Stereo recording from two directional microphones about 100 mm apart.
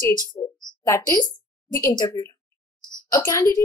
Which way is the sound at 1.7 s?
25° left (ahead or behind).